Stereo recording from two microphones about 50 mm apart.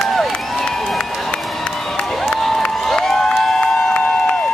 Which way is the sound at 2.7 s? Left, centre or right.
Centre.